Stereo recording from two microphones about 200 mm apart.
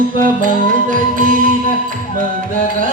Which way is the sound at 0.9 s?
45° right (ahead or behind).